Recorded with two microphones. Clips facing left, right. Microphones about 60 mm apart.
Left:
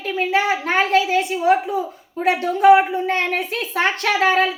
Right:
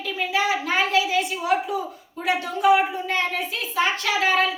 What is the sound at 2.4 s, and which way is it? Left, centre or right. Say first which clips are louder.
A woman's voice: left 7 dB; left.